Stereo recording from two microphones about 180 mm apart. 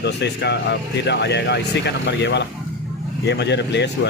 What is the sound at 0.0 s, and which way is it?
Speech, 70° left (ahead or behind).